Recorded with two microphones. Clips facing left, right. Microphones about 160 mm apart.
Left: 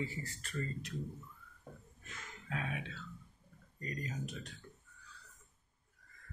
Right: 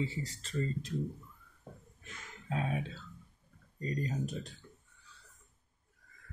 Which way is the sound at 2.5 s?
35° right (ahead or behind).